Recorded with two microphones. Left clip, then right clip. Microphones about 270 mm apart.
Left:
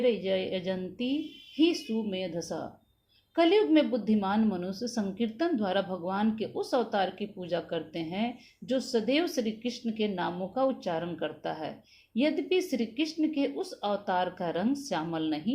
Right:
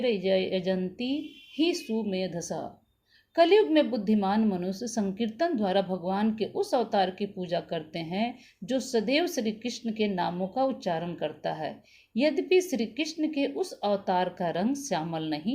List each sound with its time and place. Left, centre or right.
0.0 s speech: right